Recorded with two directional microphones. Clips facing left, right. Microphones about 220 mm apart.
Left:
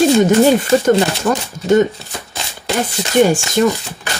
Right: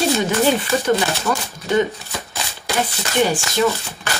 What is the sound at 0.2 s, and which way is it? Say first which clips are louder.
Speech: left 7 dB; 45° left (ahead or behind).